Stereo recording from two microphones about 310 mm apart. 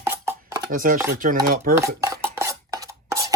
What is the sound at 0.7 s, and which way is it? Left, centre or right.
Speech, right.